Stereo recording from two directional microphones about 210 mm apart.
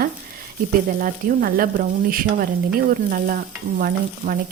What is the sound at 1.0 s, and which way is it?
A woman's voice, 45° right (ahead or behind).